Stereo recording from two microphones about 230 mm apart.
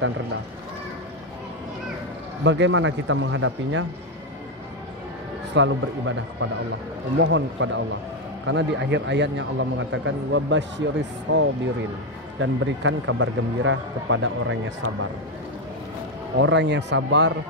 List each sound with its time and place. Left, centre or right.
2.4 s a man's voice: right
5.5 s a man's voice: right
16.3 s speech: right